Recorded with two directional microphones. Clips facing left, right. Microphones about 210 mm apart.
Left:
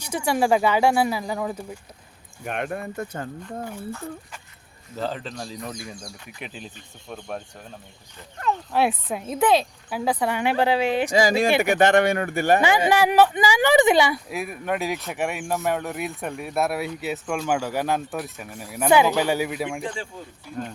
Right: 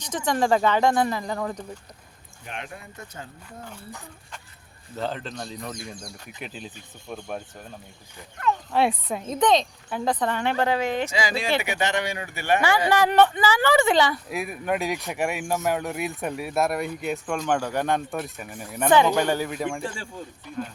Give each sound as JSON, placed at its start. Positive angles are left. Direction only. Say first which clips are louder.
{"t": 0.0, "sound": "speech", "louder": "left 2 dB", "side_deg": 10}
{"t": 2.4, "sound": "speech", "louder": "left 9 dB", "side_deg": 55}
{"t": 4.9, "sound": "speech", "louder": "left 1 dB", "side_deg": 0}
{"t": 8.7, "sound": "speech", "louder": "left 1 dB", "side_deg": 5}
{"t": 11.1, "sound": "speech", "louder": "left 6 dB", "side_deg": 45}
{"t": 12.6, "sound": "speech", "louder": "left 2 dB", "side_deg": 15}
{"t": 14.3, "sound": "speech", "louder": "even", "side_deg": 0}